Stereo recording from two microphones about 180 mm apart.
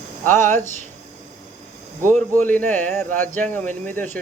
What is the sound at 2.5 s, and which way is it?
Speech, 10° left (ahead or behind).